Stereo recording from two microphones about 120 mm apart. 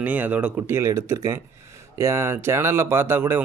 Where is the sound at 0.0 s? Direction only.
10° right (ahead or behind).